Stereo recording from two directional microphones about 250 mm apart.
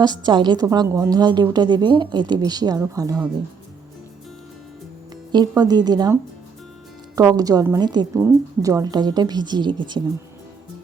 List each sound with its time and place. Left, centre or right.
0.0 s a woman's voice: centre
5.3 s a woman's voice: centre
7.2 s a woman's voice: centre